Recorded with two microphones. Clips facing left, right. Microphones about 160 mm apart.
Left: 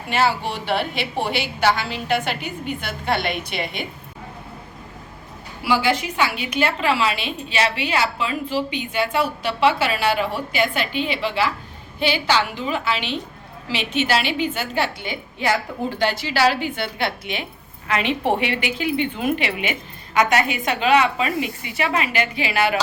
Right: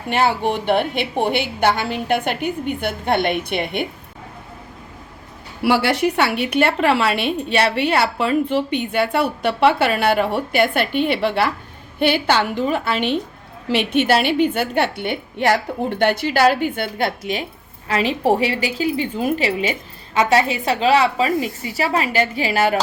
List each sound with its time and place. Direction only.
0.1 s a woman's voice: 55° right (ahead or behind)
5.6 s a woman's voice: 65° right (ahead or behind); by 22.8 s 40° right (ahead or behind)